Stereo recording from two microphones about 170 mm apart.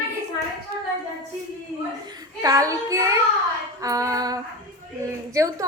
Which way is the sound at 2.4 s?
20° right (ahead or behind).